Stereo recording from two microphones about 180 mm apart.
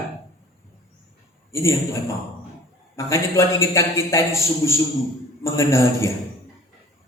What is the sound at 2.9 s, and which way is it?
Music, 15° left (ahead or behind).